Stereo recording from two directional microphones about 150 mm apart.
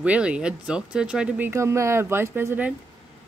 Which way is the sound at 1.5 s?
20° right (ahead or behind).